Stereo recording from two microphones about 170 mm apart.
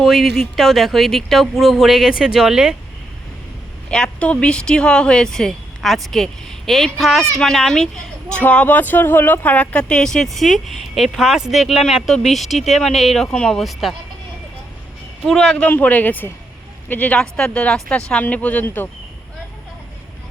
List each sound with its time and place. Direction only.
0.0 s speech: centre (ahead or behind)
3.8 s speech: 5° left (ahead or behind)
15.3 s a man's voice: 5° left (ahead or behind)